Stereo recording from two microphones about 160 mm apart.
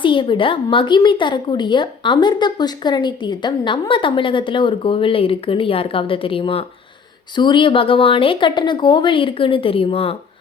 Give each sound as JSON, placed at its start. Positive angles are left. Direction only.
{"t": 0.0, "sound": "speech", "side_deg": 30}